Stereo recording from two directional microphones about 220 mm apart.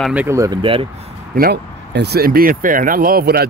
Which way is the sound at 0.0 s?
5° right (ahead or behind).